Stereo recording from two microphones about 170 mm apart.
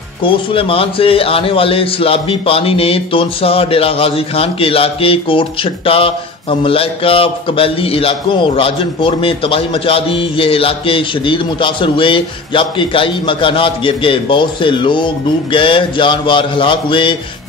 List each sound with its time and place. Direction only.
0.2 s a man's voice: 30° left (ahead or behind)